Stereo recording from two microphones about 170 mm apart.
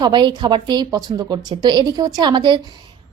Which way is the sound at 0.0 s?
25° right (ahead or behind).